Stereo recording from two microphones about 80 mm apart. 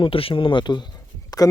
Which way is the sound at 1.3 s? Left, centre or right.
Left.